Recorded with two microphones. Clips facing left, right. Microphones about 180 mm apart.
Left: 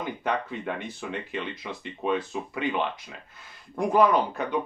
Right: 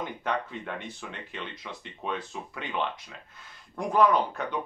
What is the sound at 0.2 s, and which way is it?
Speech, 5° left (ahead or behind).